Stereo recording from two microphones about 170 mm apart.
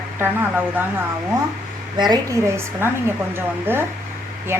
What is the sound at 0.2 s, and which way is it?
Speech, 10° right (ahead or behind).